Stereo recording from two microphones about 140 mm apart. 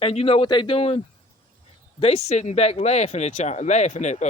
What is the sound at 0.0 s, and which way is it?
A man's voice, 45° left (ahead or behind).